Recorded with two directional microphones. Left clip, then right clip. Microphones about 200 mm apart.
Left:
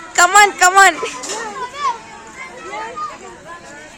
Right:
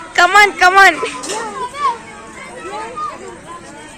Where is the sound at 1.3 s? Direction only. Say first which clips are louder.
Right 3 dB; 50° right (ahead or behind).